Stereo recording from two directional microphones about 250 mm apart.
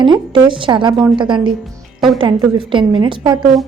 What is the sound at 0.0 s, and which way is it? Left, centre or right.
A woman's voice, centre.